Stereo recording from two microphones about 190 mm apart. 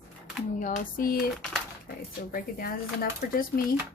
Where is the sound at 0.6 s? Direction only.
45° left (ahead or behind).